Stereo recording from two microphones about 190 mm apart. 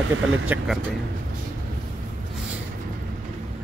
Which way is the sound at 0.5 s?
10° right (ahead or behind).